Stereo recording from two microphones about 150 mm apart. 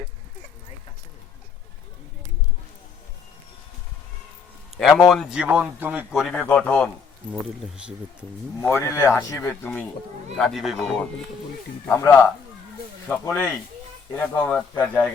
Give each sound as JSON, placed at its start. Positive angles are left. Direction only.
{"t": 4.8, "sound": "a man's voice", "side_deg": 0}
{"t": 6.1, "sound": "speech", "side_deg": 0}
{"t": 8.7, "sound": "speech", "side_deg": 20}
{"t": 10.3, "sound": "a man's voice", "side_deg": 0}
{"t": 11.9, "sound": "speech", "side_deg": 20}